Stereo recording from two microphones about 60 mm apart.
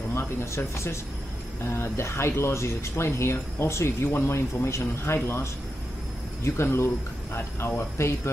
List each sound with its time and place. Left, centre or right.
0.1 s speech: left